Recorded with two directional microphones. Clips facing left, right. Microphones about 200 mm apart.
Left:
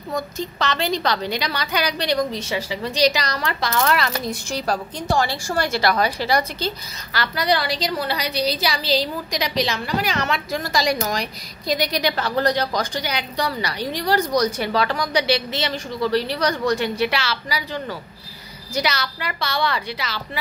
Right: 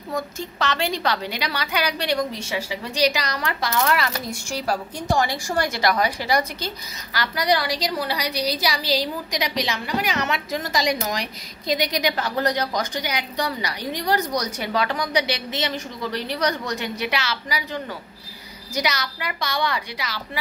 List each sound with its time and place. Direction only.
0.6 s a woman's voice: 10° right (ahead or behind)
18.8 s a woman's voice: 15° right (ahead or behind)